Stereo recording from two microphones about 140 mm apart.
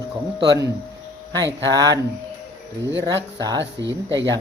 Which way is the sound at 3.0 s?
30° right (ahead or behind).